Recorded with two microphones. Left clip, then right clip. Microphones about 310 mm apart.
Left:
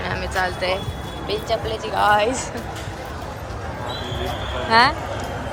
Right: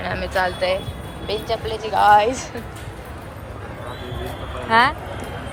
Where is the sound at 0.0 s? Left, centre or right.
Centre.